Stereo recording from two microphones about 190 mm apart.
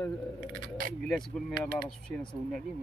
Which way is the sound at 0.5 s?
45° right (ahead or behind).